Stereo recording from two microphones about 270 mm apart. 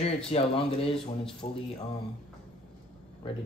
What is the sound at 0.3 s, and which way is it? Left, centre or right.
Speech, left.